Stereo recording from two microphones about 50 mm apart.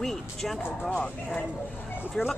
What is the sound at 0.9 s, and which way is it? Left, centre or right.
Speech, left.